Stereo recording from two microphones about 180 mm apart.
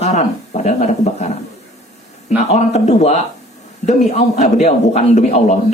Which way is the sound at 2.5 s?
40° left (ahead or behind).